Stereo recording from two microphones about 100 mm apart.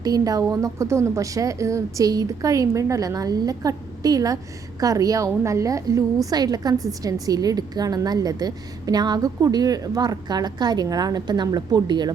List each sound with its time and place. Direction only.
0.0 s a woman's voice: 40° right (ahead or behind)